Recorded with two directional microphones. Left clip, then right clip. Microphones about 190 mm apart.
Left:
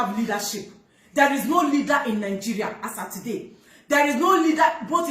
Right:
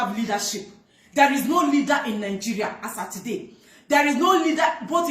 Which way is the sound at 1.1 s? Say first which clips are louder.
Right 1 dB; 15° left (ahead or behind).